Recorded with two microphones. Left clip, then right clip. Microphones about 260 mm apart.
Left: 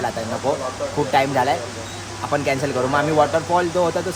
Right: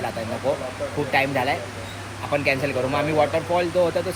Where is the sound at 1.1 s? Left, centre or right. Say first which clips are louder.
Left 3 dB; centre.